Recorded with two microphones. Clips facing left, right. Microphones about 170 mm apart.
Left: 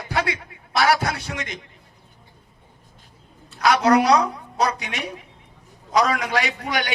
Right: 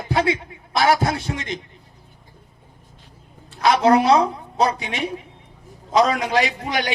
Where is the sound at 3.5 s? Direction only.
25° right (ahead or behind).